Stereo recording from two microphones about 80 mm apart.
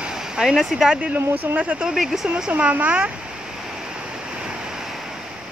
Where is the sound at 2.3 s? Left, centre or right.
Centre.